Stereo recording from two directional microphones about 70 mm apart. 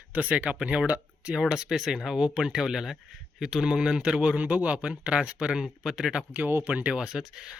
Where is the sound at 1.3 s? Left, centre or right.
Centre.